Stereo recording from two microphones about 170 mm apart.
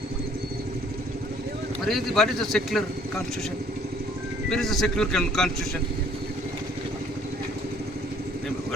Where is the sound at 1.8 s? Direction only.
Centre (ahead or behind).